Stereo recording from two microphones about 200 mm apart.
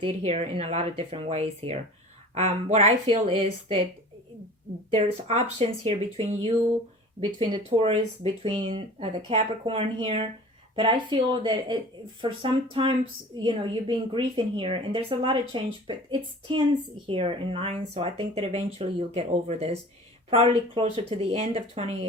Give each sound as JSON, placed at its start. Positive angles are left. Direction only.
{"t": 0.0, "sound": "speech", "side_deg": -30}
{"t": 4.9, "sound": "speech", "side_deg": -30}
{"t": 17.1, "sound": "speech", "side_deg": -25}